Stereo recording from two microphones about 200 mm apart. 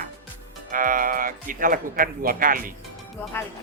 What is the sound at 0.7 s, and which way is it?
Speech, 40° right (ahead or behind).